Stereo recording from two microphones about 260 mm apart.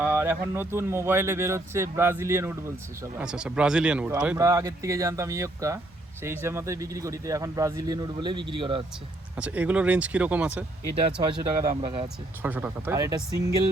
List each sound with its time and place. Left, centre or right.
0.0 s speech: centre
9.3 s speech: centre
11.2 s speech: centre
12.4 s speech: centre